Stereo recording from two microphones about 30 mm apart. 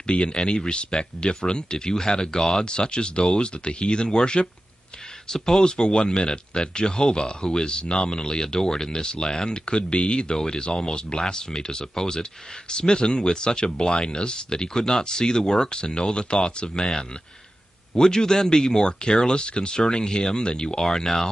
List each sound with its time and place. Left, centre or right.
0.0 s speech: left
2.6 s speech: left
5.3 s speech: centre
5.6 s speech: left
17.9 s speech: left
20.8 s speech: centre